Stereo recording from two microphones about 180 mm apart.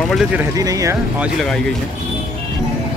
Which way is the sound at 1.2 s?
Centre (ahead or behind).